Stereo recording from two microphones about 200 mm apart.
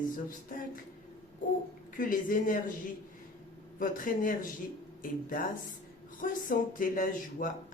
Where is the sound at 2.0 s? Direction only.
45° left (ahead or behind).